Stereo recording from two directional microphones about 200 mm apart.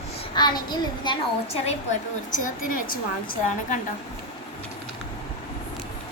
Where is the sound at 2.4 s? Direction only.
45° left (ahead or behind).